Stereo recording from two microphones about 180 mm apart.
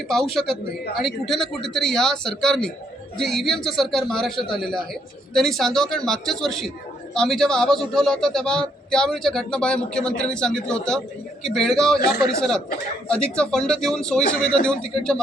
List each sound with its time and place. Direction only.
0.3 s a man's voice: centre (ahead or behind)